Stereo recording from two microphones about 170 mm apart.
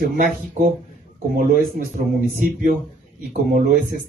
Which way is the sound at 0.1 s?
55° right (ahead or behind).